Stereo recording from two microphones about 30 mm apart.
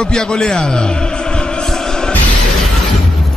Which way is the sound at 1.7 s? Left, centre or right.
Centre.